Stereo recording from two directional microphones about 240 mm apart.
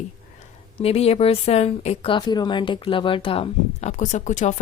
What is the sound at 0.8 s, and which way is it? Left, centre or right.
A woman's voice, left.